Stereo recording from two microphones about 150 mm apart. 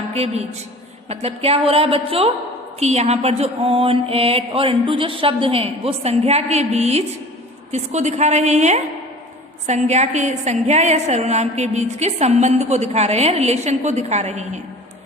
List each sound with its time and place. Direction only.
0.1 s a woman's voice: 45° right (ahead or behind)
1.0 s mantra: 45° right (ahead or behind)
7.7 s a woman's voice: 50° right (ahead or behind)